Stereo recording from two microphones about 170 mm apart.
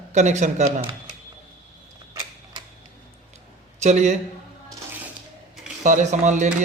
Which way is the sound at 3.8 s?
45° right (ahead or behind).